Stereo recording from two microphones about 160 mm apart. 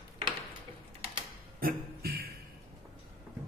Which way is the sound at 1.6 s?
70° right (ahead or behind).